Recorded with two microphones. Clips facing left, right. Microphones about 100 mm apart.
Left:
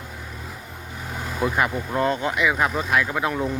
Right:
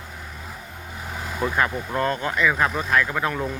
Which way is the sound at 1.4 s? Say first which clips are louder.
Left 1 dB; 10° left (ahead or behind).